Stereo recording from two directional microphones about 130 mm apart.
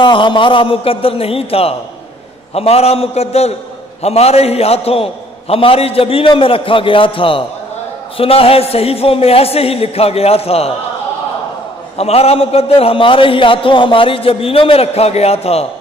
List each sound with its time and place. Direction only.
0.0 s a man's voice: 40° left (ahead or behind)
12.0 s a man's voice: 50° left (ahead or behind)